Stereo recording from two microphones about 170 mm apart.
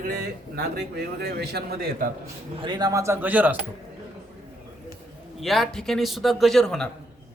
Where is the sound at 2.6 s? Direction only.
25° right (ahead or behind); by 3.6 s 10° right (ahead or behind).